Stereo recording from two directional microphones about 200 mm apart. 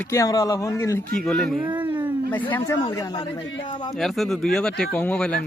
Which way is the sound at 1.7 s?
25° right (ahead or behind).